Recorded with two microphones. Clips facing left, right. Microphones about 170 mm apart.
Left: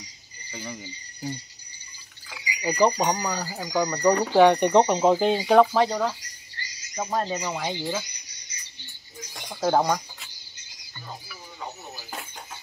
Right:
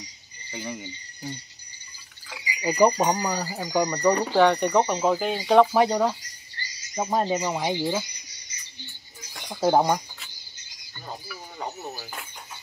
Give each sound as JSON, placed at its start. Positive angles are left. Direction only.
{"t": 0.6, "sound": "speech", "side_deg": -5}
{"t": 2.6, "sound": "speech", "side_deg": -5}
{"t": 3.9, "sound": "speech", "side_deg": 0}
{"t": 4.3, "sound": "speech", "side_deg": 15}
{"t": 5.4, "sound": "speech", "side_deg": 5}
{"t": 5.7, "sound": "speech", "side_deg": -10}
{"t": 9.5, "sound": "speech", "side_deg": -15}